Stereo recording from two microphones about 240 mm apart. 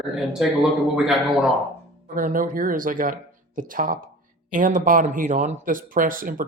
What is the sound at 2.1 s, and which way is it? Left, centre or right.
Speech, right.